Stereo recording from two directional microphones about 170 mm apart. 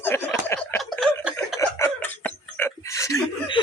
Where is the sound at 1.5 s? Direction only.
15° left (ahead or behind).